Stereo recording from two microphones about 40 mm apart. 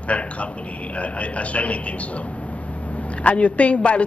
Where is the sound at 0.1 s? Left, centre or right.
Left.